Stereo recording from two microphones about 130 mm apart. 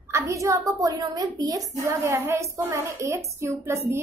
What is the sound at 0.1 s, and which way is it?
A woman's voice, 25° right (ahead or behind).